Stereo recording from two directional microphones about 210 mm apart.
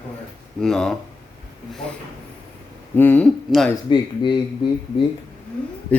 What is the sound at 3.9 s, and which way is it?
Speech, 20° left (ahead or behind).